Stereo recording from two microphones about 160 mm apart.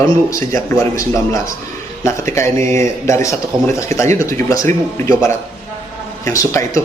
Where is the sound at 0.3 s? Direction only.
20° left (ahead or behind).